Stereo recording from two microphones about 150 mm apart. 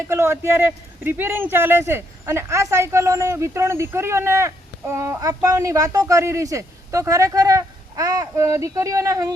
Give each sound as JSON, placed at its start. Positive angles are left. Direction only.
{"t": 0.1, "sound": "a man's voice", "side_deg": -20}